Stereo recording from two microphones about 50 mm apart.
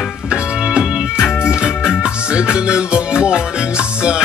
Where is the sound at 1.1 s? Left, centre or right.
Left.